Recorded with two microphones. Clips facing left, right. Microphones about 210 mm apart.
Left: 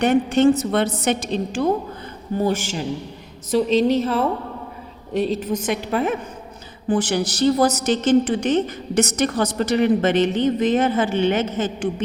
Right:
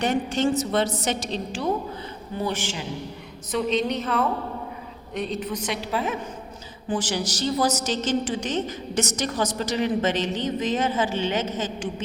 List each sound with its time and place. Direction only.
0.0 s a woman's voice: 60° left (ahead or behind)